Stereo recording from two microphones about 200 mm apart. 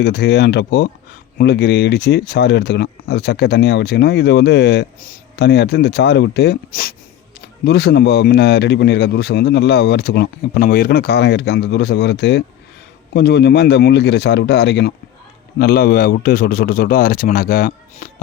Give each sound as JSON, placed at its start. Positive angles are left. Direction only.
{"t": 0.0, "sound": "a man's voice", "side_deg": 55}
{"t": 18.0, "sound": "music", "side_deg": 45}